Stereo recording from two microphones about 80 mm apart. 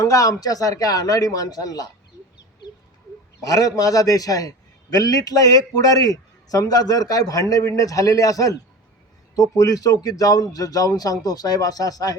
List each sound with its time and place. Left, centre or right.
0.0 s a man's voice: left
3.4 s a man's voice: left